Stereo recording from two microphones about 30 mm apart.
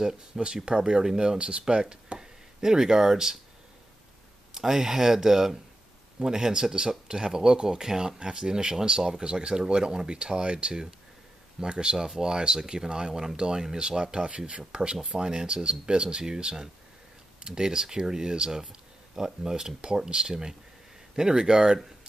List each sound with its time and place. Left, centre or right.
0.3 s speech: centre
0.7 s speech: right
4.6 s speech: centre; by 14.6 s right
14.7 s speech: right